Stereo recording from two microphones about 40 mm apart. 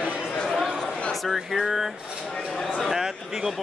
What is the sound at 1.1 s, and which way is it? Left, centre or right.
Speech, centre.